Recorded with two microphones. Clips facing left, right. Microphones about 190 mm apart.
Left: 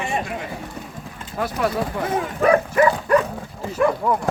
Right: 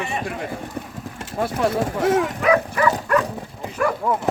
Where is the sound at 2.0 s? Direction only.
80° right.